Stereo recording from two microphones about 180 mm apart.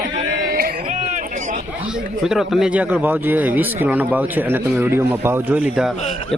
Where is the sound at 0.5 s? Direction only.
50° right (ahead or behind).